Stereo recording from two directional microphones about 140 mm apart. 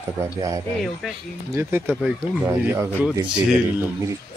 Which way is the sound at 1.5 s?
15° right (ahead or behind).